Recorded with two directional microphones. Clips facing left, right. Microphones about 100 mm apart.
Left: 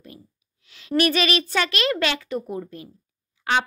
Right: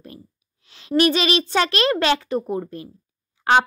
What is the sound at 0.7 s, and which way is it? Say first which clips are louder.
A child's voice: right 3 dB; 30° right (ahead or behind).